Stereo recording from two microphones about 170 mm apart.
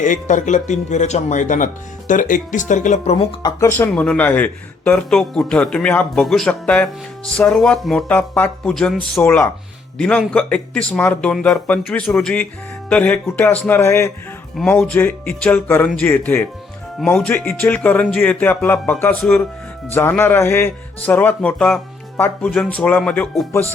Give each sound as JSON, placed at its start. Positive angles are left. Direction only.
{"t": 0.0, "sound": "speech", "side_deg": 50}
{"t": 3.4, "sound": "speech", "side_deg": 15}